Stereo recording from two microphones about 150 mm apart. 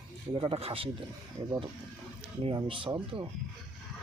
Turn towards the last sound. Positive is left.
turn(degrees=-35)  # may be behind; listen again after turning